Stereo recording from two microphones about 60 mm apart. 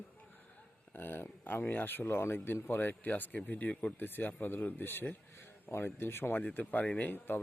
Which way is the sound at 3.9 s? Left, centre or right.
Left.